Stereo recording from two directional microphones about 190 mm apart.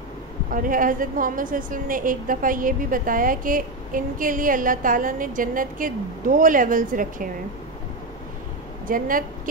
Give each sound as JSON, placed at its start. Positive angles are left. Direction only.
{"t": 0.5, "sound": "a woman's voice", "side_deg": -45}
{"t": 8.8, "sound": "a woman's voice", "side_deg": -45}